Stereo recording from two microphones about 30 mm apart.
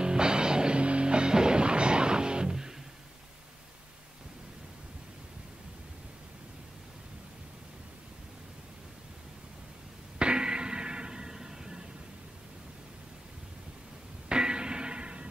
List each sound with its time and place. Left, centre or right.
0.0 s music: right
10.1 s a sound: right
14.3 s music: right